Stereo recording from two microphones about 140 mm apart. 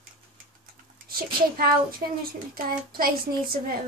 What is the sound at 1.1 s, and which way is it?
A woman's voice, 90° right.